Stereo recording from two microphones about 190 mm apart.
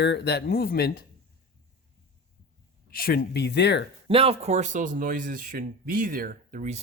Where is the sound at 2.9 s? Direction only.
50° left (ahead or behind).